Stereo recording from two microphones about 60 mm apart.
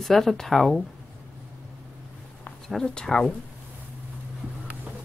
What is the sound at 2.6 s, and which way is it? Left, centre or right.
Speech, centre.